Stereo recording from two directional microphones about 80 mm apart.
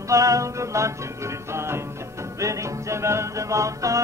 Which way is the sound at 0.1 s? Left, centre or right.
Right.